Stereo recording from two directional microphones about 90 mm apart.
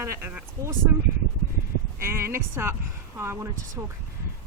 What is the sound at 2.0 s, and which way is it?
Speech, 30° right (ahead or behind).